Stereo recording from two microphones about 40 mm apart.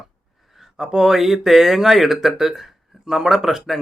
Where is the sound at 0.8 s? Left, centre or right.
Centre.